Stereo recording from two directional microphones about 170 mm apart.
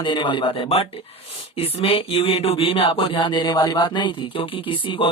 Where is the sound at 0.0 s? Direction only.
30° left (ahead or behind).